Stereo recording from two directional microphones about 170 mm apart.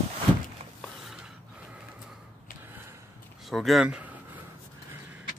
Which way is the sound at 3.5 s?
Centre (ahead or behind).